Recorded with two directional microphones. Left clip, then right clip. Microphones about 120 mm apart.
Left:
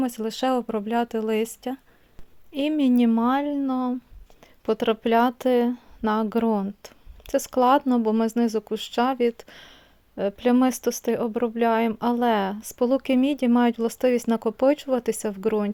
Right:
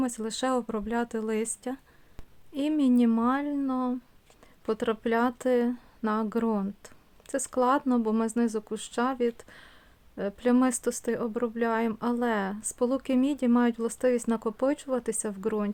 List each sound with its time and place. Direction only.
0.0 s speech: 20° left (ahead or behind)